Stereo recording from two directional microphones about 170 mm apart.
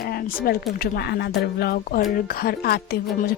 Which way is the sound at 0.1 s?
60° left (ahead or behind).